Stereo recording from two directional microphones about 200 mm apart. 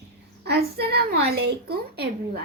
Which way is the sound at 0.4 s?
55° right (ahead or behind).